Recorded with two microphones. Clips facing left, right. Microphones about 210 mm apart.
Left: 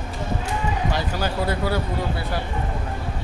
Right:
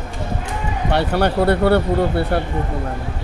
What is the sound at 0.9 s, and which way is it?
Speech, 65° right (ahead or behind).